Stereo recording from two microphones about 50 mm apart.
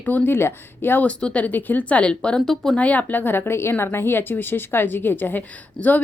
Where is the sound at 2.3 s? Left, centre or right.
Centre.